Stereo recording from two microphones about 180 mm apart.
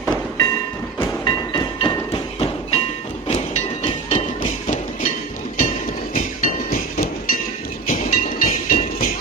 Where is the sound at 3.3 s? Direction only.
40° left (ahead or behind).